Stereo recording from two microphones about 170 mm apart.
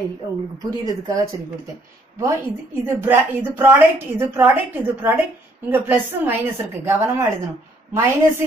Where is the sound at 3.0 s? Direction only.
10° right (ahead or behind).